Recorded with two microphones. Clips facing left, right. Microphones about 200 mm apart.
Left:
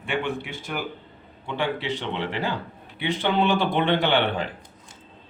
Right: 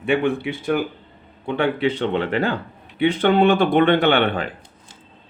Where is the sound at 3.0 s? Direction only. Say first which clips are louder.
Right 7 dB; 55° right (ahead or behind).